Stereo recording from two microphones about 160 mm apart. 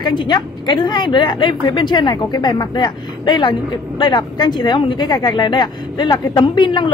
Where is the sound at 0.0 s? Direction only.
30° left (ahead or behind).